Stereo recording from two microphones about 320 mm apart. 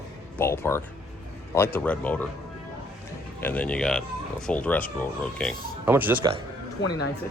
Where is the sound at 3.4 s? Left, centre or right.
Centre.